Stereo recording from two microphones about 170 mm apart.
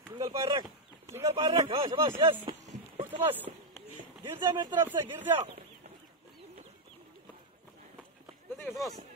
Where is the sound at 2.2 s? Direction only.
25° right (ahead or behind).